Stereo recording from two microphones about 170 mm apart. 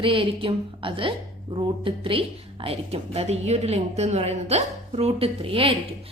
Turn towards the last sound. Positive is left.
turn(degrees=-35)  # may be behind; listen again after turning